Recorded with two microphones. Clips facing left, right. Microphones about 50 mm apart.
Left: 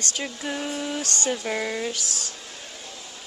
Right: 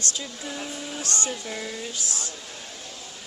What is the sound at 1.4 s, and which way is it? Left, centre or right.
Speech, left.